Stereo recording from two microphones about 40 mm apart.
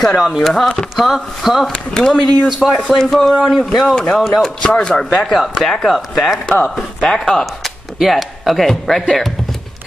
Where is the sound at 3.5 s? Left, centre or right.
Centre.